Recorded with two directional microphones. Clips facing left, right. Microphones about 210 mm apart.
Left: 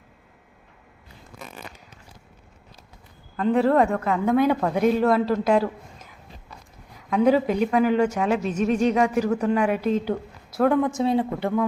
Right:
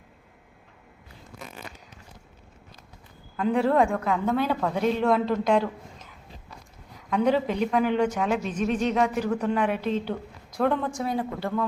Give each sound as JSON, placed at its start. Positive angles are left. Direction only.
{"t": 3.3, "sound": "a man's voice", "side_deg": 0}
{"t": 7.1, "sound": "a woman's voice", "side_deg": 5}
{"t": 10.9, "sound": "a man's voice", "side_deg": 25}